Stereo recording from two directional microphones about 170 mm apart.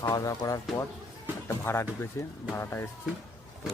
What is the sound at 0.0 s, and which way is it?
Speech, 20° left (ahead or behind).